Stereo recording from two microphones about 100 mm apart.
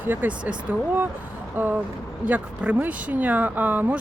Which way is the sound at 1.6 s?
20° right (ahead or behind).